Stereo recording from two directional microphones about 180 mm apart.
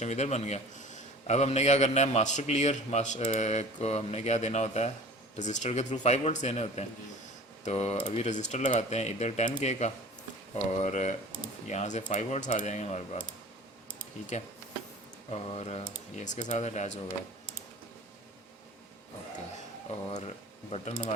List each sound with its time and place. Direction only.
0.0 s a man's voice: 40° left (ahead or behind)
15.3 s a man's voice: 35° left (ahead or behind)
19.9 s a man's voice: 35° left (ahead or behind)